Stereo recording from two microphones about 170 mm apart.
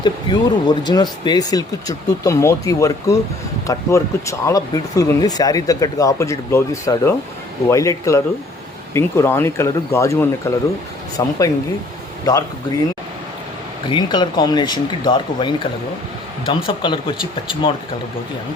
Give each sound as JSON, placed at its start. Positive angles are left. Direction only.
{"t": 0.0, "sound": "speech", "side_deg": 25}
{"t": 13.8, "sound": "speech", "side_deg": 25}